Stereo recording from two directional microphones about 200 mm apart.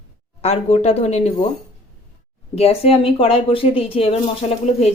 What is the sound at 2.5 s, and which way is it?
Speech, 30° left (ahead or behind).